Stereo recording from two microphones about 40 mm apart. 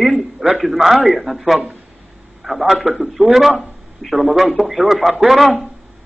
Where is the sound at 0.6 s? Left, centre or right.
Centre.